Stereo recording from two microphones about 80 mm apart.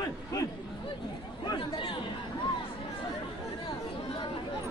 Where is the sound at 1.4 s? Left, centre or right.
Left.